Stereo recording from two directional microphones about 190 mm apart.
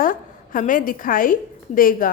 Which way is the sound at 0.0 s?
45° left (ahead or behind).